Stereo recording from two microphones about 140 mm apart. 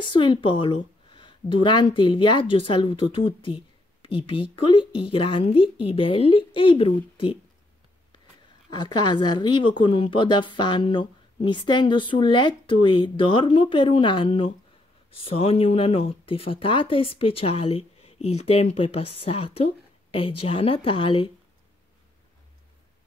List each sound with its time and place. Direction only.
0.1 s speech: 35° left (ahead or behind)
8.6 s speech: 30° left (ahead or behind)